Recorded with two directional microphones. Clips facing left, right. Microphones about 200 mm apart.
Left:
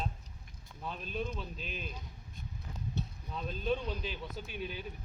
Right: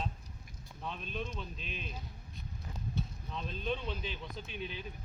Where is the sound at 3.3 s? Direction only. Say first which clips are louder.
Left 3 dB; 5° left (ahead or behind).